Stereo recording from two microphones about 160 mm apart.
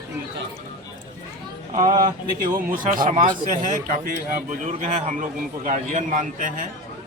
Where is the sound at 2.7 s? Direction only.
60° right (ahead or behind).